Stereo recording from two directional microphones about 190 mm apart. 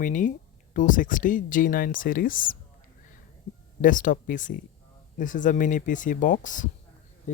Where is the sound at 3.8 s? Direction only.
45° left (ahead or behind).